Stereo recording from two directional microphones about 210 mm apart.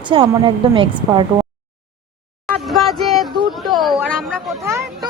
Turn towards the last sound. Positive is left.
turn(degrees=-15)  # may be behind; listen again after turning